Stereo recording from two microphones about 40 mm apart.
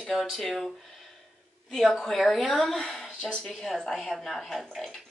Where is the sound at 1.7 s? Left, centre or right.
Centre.